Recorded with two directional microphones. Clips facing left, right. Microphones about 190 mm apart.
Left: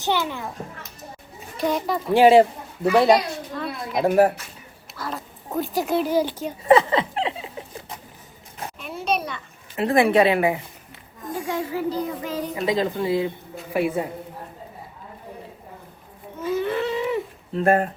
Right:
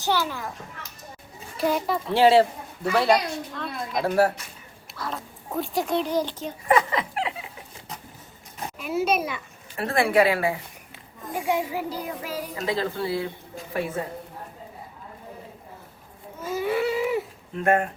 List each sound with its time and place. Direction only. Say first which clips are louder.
0.0 s speech: left 1 dB; 20° left (ahead or behind)
1.5 s a child's voice: left 1 dB; 5° right (ahead or behind)
2.0 s a woman's voice: left 4 dB; 15° left (ahead or behind)
3.5 s a sound: left 3 dB; 5° left (ahead or behind)
4.9 s speech: left 1 dB; centre (ahead or behind)
6.7 s a sound: left 5 dB; 25° left (ahead or behind)
8.8 s a child's voice: right 2 dB; 5° right (ahead or behind)
9.7 s speech: left 3 dB; 20° left (ahead or behind)
11.3 s speech: right 1 dB; 10° right (ahead or behind)
12.6 s a woman's voice: left 4 dB; 15° left (ahead or behind)
16.6 s a sound: right 2 dB; 10° right (ahead or behind)
17.5 s speech: left 3 dB; 35° left (ahead or behind)